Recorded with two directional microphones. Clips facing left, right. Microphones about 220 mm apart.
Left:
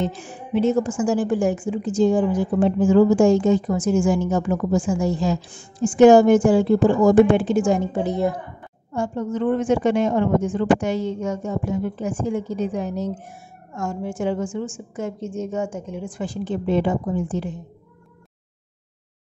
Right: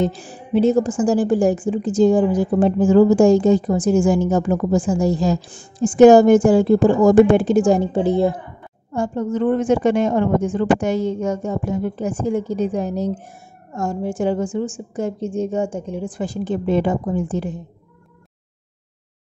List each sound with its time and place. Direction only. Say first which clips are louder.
0.0 s a woman's voice: right 5 dB; 35° right (ahead or behind)
8.9 s a woman's voice: right 3 dB; 40° right (ahead or behind)